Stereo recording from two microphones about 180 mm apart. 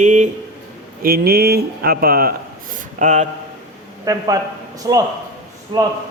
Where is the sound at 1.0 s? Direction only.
55° right (ahead or behind).